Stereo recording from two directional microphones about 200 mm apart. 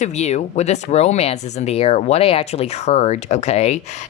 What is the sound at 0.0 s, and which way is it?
Speech, 35° left (ahead or behind).